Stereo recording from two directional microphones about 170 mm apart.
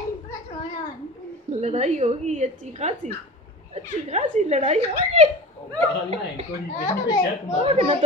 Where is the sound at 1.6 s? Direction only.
40° right (ahead or behind).